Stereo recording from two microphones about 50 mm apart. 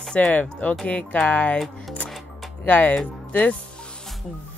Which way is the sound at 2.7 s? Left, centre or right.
Left.